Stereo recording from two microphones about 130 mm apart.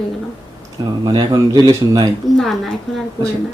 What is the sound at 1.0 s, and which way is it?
A man's voice, 30° right (ahead or behind).